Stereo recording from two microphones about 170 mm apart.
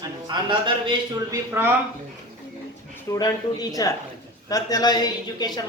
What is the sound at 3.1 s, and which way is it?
A man's voice, 20° left (ahead or behind).